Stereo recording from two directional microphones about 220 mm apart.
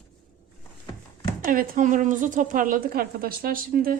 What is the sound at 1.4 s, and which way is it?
A woman's voice, 40° right (ahead or behind).